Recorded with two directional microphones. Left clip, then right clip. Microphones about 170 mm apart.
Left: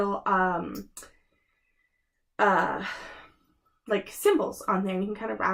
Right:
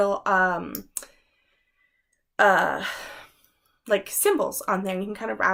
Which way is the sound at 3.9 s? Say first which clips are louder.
Right 2 dB; 15° right (ahead or behind).